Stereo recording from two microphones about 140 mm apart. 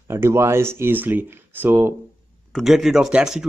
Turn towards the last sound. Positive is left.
turn(degrees=-5)  # may be behind; listen again after turning